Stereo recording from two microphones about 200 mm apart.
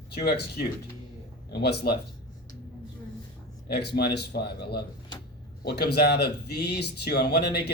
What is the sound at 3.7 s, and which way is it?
A man's voice, 55° left (ahead or behind).